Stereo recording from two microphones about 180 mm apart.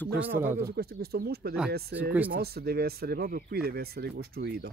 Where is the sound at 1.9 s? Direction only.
70° right (ahead or behind).